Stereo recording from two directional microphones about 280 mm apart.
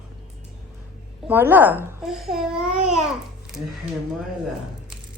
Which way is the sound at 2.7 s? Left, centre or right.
Right.